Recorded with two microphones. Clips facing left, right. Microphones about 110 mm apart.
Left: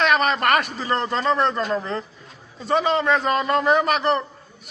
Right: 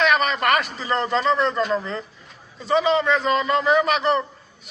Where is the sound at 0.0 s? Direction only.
50° left (ahead or behind).